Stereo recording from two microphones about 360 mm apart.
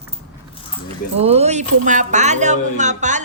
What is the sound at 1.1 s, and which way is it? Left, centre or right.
Speech, centre.